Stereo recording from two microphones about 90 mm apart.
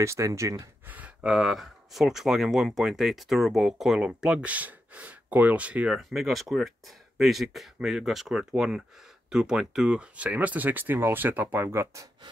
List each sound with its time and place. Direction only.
0.0 s speech: 35° right (ahead or behind)
0.8 s speech: 15° right (ahead or behind)
5.9 s speech: centre (ahead or behind); by 12.1 s 35° right (ahead or behind)